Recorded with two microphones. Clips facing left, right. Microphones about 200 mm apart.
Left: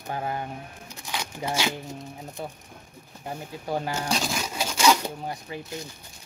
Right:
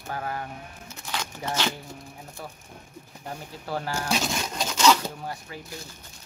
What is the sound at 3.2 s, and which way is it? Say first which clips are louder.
Speech: left 3 dB; 15° left (ahead or behind).